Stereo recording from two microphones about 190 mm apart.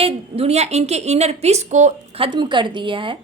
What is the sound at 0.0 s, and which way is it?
A woman's voice, 30° right (ahead or behind).